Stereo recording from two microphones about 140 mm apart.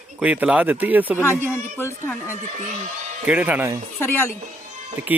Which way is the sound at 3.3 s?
10° right (ahead or behind).